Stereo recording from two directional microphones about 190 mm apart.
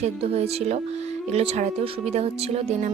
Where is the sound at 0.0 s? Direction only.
35° right (ahead or behind).